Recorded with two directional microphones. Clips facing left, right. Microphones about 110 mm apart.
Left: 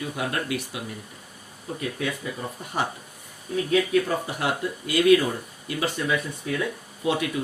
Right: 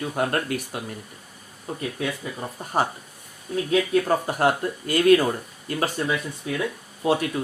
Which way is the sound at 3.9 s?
45° right (ahead or behind).